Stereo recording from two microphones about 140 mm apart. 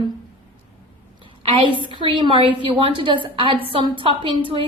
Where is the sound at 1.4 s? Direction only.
40° right (ahead or behind).